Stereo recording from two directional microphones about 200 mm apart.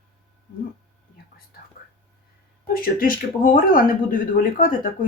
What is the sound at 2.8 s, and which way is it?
Speech, 45° left (ahead or behind).